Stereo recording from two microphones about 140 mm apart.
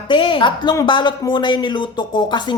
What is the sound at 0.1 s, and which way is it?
Speech, 35° left (ahead or behind).